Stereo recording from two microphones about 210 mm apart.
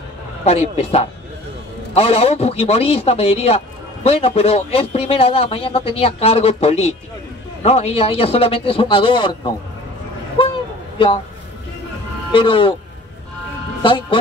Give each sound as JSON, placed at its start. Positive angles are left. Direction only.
{"t": 0.5, "sound": "a man's voice", "side_deg": 30}
{"t": 10.4, "sound": "a sound", "side_deg": 25}
{"t": 11.0, "sound": "a man's voice", "side_deg": 25}
{"t": 12.3, "sound": "a man's voice", "side_deg": 25}
{"t": 13.8, "sound": "a man's voice", "side_deg": 25}